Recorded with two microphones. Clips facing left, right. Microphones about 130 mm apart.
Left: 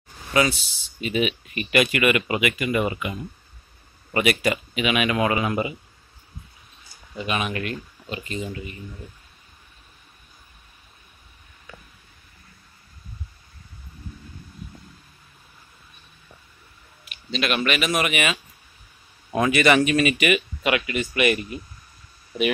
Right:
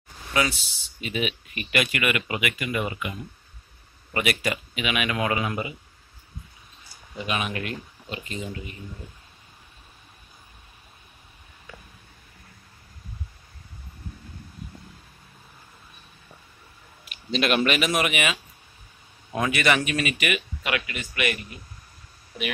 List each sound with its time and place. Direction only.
0.3 s speech: 5° left (ahead or behind)
5.4 s speech: 15° left (ahead or behind)
7.2 s speech: 5° right (ahead or behind)
17.3 s speech: 35° right (ahead or behind)
18.0 s speech: 10° right (ahead or behind)
19.5 s speech: centre (ahead or behind)
20.7 s speech: 20° left (ahead or behind)